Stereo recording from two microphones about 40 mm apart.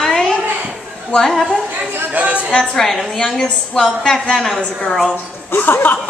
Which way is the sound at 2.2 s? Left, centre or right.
Right.